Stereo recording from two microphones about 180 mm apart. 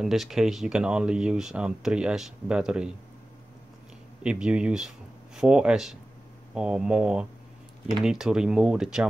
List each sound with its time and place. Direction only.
0.0 s speech: centre (ahead or behind)
4.2 s speech: 5° right (ahead or behind)